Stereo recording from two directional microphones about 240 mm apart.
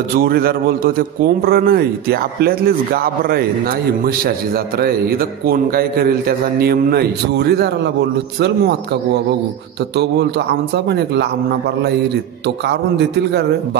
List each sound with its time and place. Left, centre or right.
0.1 s a man's voice: right
4.7 s a man's voice: right
12.4 s speech: right